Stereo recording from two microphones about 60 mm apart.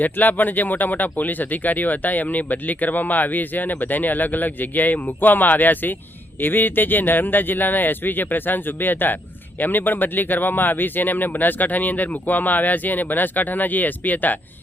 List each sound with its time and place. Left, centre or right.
0.0 s speech: left